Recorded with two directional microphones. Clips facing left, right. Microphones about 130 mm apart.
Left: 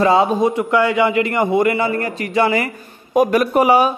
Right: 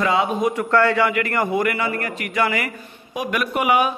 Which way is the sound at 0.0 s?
35° left (ahead or behind).